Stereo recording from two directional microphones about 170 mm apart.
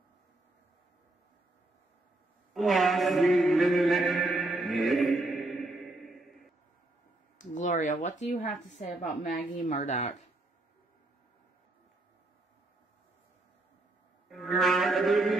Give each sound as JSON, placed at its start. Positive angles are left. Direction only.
{"t": 2.5, "sound": "a sound", "side_deg": 0}
{"t": 7.3, "sound": "speech", "side_deg": 45}
{"t": 14.3, "sound": "mantra", "side_deg": 0}